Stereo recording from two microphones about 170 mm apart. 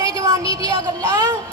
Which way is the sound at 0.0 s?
20° right (ahead or behind).